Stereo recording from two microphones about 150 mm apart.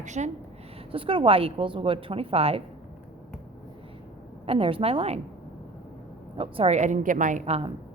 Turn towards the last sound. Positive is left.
turn(degrees=-45)  # may be behind; listen again after turning